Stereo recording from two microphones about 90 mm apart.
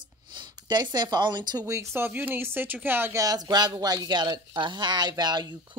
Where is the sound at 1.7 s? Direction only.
30° right (ahead or behind).